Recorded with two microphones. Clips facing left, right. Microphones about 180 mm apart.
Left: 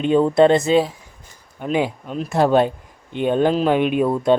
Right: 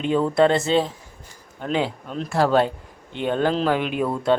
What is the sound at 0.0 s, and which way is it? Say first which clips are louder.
Speech: left 4 dB; 20° left (ahead or behind).